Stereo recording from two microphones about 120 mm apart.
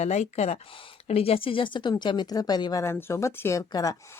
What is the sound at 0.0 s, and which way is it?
Speech, 70° left (ahead or behind).